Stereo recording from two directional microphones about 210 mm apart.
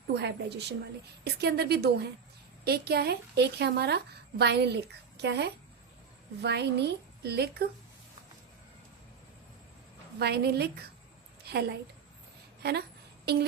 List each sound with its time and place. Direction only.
0.1 s a woman's voice: 55° right (ahead or behind)
10.2 s a woman's voice: 50° right (ahead or behind)
11.5 s a sound: 50° right (ahead or behind)
13.3 s a woman's voice: 50° right (ahead or behind)